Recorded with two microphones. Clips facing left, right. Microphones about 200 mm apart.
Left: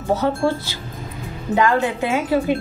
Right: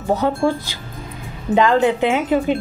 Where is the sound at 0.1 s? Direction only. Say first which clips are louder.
Right 1 dB; 15° right (ahead or behind).